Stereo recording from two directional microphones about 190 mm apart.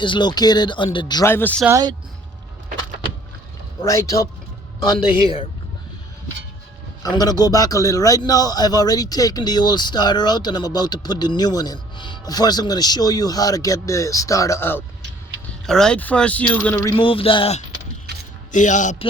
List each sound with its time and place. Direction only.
0.0 s a man's voice: 25° left (ahead or behind)
1.6 s speech: 20° right (ahead or behind)
3.8 s a man's voice: 15° left (ahead or behind)
7.0 s a man's voice: 20° left (ahead or behind)
16.9 s a man's voice: 30° left (ahead or behind)
18.5 s a man's voice: 40° left (ahead or behind)